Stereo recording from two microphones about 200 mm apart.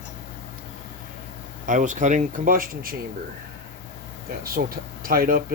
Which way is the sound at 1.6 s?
40° right (ahead or behind).